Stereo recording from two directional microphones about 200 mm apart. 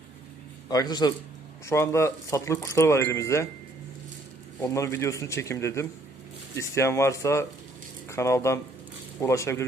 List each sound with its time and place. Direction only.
0.7 s a man's voice: 20° left (ahead or behind)
4.6 s speech: 15° left (ahead or behind)